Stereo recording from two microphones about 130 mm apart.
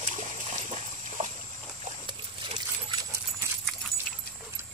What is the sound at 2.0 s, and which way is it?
Pig, 35° right (ahead or behind).